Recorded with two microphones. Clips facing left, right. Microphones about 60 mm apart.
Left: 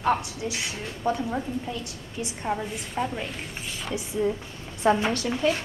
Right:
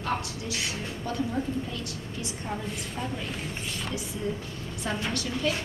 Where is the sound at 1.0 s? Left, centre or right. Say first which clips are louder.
Left 4 dB; left.